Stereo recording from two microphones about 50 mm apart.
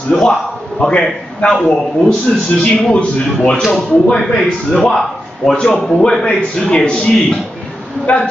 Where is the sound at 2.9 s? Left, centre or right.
Centre.